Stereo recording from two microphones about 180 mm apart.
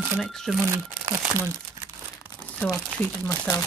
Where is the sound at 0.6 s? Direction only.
15° right (ahead or behind).